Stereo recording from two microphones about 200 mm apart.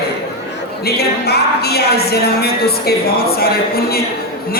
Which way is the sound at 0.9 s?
50° left (ahead or behind).